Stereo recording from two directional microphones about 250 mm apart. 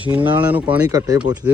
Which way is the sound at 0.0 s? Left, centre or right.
Centre.